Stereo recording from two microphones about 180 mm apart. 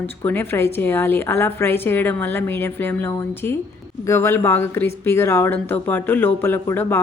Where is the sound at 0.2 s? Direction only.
10° left (ahead or behind).